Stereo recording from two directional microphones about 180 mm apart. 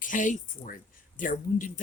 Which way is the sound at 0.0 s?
45° left (ahead or behind).